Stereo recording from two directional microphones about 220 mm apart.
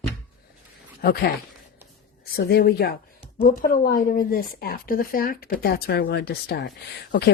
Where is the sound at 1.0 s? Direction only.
45° left (ahead or behind).